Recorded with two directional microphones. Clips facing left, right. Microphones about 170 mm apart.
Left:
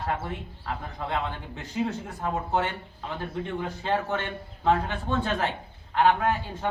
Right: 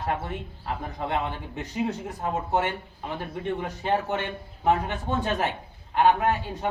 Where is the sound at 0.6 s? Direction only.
20° right (ahead or behind).